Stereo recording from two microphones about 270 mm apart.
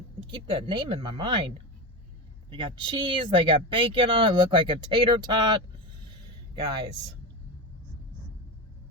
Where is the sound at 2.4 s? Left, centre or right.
Centre.